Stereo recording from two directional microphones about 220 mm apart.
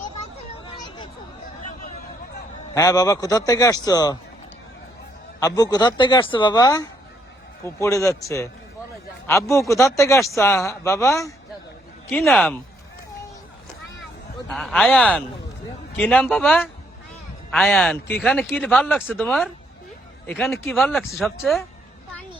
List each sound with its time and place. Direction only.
0.6 s a sound: 20° left (ahead or behind)
2.7 s a man's voice: 15° left (ahead or behind)
5.4 s a man's voice: 15° left (ahead or behind)
12.3 s speech: centre (ahead or behind)
14.5 s speech: centre (ahead or behind)